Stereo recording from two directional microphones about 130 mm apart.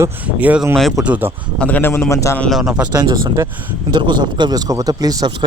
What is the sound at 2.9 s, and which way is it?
A man's voice, 30° right (ahead or behind).